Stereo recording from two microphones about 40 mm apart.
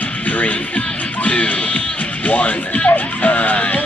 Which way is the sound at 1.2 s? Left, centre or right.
Left.